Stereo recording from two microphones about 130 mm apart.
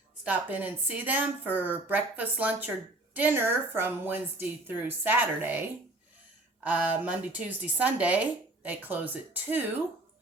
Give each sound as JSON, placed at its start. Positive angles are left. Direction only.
{"t": 0.3, "sound": "speech", "side_deg": -15}
{"t": 6.7, "sound": "speech", "side_deg": -10}